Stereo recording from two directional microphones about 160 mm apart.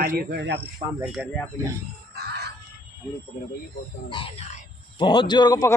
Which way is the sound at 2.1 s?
90° right.